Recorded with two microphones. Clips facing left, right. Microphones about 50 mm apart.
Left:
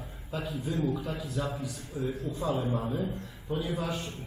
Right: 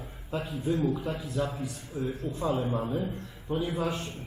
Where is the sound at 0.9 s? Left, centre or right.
Centre.